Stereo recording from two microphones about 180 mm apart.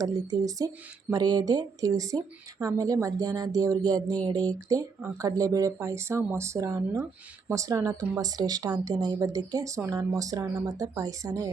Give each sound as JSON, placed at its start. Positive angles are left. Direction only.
{"t": 0.0, "sound": "speech", "side_deg": -20}